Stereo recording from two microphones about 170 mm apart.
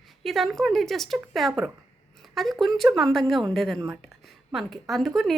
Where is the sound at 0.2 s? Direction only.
Centre (ahead or behind).